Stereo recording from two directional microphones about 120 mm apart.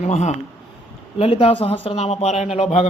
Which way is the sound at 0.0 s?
70° left (ahead or behind).